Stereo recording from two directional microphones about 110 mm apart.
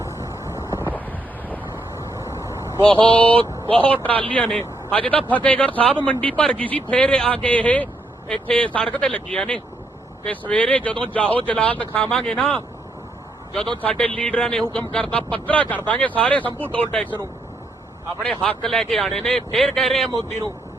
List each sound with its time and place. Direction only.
0.2 s vehicle: 25° right (ahead or behind)
0.9 s wind noise: 15° left (ahead or behind)
2.0 s vehicle: 25° right (ahead or behind)
2.9 s speech: 50° right (ahead or behind)
3.9 s speech: 15° left (ahead or behind)
18.2 s speech: 5° left (ahead or behind)
20.1 s speech: 35° right (ahead or behind)